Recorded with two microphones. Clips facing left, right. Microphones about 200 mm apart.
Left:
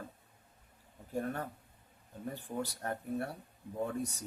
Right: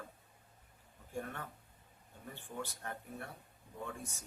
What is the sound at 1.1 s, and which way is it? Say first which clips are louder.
Speech: left 7 dB; 35° left (ahead or behind).